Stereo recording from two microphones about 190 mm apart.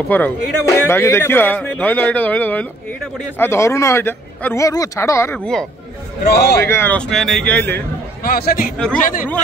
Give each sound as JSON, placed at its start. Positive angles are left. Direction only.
{"t": 0.1, "sound": "speech", "side_deg": 10}
{"t": 6.2, "sound": "a man's voice", "side_deg": 55}
{"t": 6.6, "sound": "speech", "side_deg": 10}
{"t": 8.2, "sound": "speech", "side_deg": 50}